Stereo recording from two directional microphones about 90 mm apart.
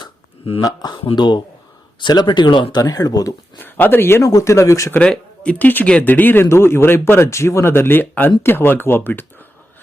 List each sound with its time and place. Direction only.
0.6 s speech: 50° left (ahead or behind); by 2.7 s 70° left (ahead or behind)
2.7 s speech: 45° left (ahead or behind)
3.6 s speech: 20° left (ahead or behind)
4.2 s speech: 40° left (ahead or behind)
4.9 s speech: 10° left (ahead or behind)